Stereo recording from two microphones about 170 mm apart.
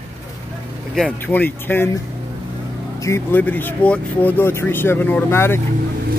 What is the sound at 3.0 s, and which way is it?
Speech, 15° left (ahead or behind).